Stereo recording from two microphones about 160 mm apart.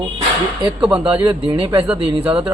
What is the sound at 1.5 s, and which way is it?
Speech, 15° right (ahead or behind).